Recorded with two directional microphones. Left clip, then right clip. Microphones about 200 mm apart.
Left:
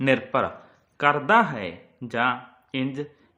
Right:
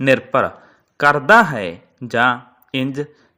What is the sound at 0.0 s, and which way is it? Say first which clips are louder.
A man's voice: right 7 dB; 30° right (ahead or behind).